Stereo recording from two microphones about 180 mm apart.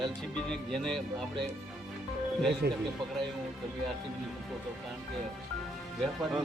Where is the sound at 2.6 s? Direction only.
60° right (ahead or behind).